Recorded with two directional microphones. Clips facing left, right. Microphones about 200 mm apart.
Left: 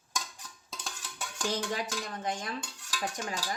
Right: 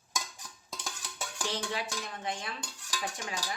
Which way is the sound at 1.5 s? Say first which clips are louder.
Left 3 dB; 45° left (ahead or behind).